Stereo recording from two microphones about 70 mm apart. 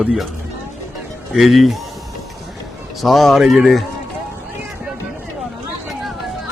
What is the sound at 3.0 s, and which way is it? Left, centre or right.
Speech, centre.